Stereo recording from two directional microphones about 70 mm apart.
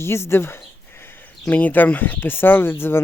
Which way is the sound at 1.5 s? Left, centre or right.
Left.